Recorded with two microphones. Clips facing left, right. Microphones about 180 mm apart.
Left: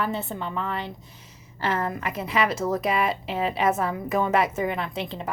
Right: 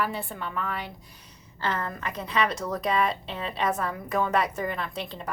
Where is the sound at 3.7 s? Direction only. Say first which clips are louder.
Left 5 dB; 25° left (ahead or behind).